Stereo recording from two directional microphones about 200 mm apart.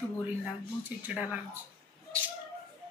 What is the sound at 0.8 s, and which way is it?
Speech, 5° right (ahead or behind).